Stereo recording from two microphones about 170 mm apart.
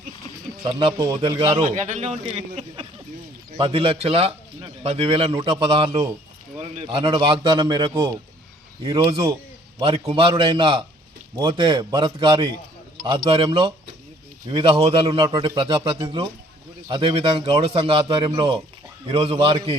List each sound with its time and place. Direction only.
0.6 s a man's voice: 30° right (ahead or behind)